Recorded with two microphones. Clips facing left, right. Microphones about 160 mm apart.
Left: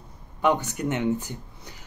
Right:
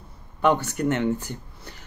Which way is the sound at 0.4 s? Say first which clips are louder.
Right 2 dB; 15° left (ahead or behind).